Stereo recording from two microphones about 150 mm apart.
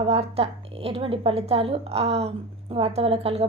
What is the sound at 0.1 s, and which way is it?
A woman's voice, 40° right (ahead or behind).